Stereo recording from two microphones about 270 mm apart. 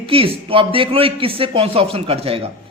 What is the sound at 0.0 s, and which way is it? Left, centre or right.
A woman's voice, right.